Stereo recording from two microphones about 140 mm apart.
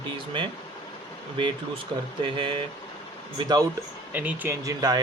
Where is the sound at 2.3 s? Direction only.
35° right (ahead or behind).